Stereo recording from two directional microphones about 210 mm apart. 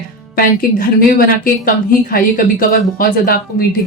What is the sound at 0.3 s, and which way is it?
A woman's voice, 45° left (ahead or behind).